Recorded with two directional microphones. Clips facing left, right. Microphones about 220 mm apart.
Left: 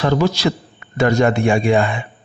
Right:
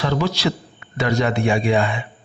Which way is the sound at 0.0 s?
45° left (ahead or behind).